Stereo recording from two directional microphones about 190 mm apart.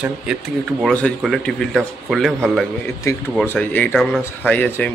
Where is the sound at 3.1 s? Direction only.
15° left (ahead or behind).